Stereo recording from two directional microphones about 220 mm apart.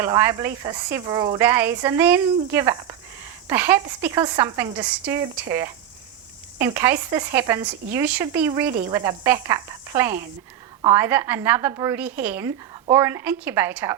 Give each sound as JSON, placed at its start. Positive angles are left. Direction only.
{"t": 0.0, "sound": "speech", "side_deg": -10}